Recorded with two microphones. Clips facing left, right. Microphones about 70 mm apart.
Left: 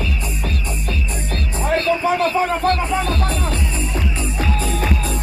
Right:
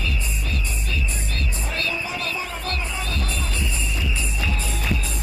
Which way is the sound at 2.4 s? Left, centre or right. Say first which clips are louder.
Left 11 dB; left.